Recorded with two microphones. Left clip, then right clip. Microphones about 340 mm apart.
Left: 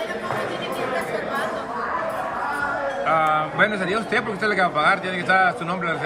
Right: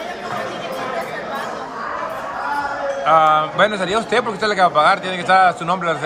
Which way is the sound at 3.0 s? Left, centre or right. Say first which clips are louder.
Right 7 dB; centre.